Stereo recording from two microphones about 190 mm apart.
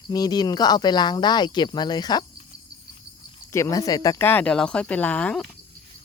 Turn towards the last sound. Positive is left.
turn(degrees=5)  # may be behind; listen again after turning